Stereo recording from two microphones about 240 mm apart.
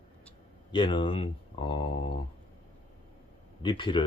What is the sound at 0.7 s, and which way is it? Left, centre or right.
Speech, centre.